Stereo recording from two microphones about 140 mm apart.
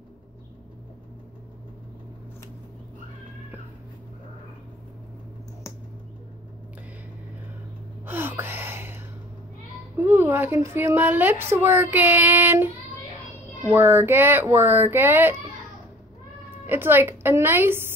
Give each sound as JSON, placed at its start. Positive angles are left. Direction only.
{"t": 8.0, "sound": "gasp", "side_deg": -15}
{"t": 9.9, "sound": "speech", "side_deg": -15}
{"t": 16.6, "sound": "speech", "side_deg": -15}